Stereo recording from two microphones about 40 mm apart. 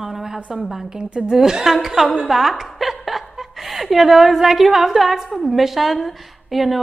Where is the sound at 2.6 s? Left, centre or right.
Centre.